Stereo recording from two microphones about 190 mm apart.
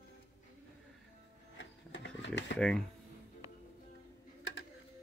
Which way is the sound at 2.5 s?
5° left (ahead or behind).